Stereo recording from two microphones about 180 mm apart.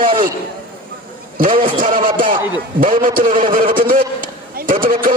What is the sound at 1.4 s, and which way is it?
A man's voice, 50° right (ahead or behind).